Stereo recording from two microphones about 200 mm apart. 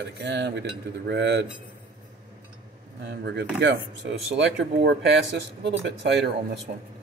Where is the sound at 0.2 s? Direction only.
60° right (ahead or behind).